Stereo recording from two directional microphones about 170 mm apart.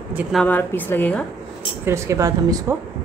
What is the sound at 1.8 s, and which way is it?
Speech, 15° right (ahead or behind).